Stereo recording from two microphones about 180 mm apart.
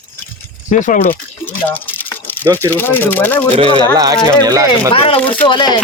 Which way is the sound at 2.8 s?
10° left (ahead or behind).